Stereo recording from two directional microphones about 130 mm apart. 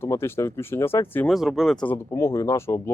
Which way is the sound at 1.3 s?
Centre (ahead or behind).